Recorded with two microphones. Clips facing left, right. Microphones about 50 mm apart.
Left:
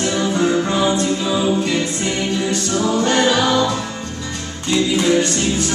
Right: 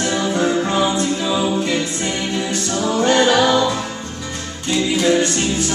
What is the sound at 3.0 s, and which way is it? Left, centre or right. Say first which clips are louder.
Music: right 3 dB; centre.